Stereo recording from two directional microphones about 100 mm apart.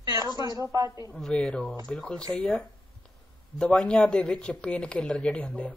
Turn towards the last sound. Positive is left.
turn(degrees=10)  # may be behind; listen again after turning